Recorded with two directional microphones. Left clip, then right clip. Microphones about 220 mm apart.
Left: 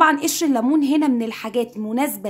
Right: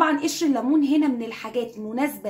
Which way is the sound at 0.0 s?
40° left (ahead or behind).